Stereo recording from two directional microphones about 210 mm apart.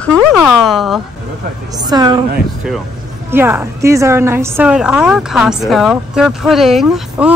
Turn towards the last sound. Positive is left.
turn(degrees=-5)  # may be behind; listen again after turning